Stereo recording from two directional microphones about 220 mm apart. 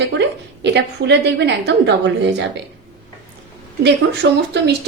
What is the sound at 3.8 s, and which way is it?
Speech, 50° right (ahead or behind).